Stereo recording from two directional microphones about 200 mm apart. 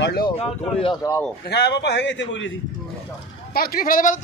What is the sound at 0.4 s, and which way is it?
Speech, 30° left (ahead or behind).